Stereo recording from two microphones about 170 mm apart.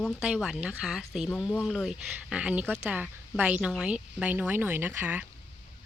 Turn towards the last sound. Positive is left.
turn(degrees=-10)  # may be behind; listen again after turning